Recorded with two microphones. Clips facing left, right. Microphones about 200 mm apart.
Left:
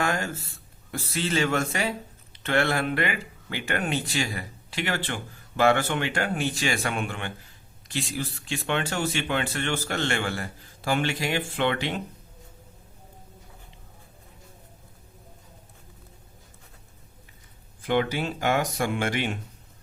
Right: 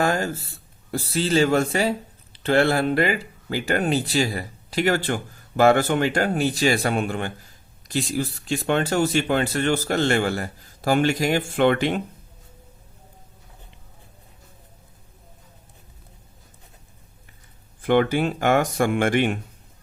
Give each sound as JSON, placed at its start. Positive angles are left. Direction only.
{"t": 0.0, "sound": "speech", "side_deg": -35}
{"t": 17.8, "sound": "speech", "side_deg": -55}